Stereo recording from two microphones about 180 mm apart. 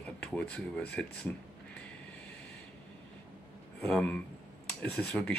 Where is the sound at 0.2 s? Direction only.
5° left (ahead or behind).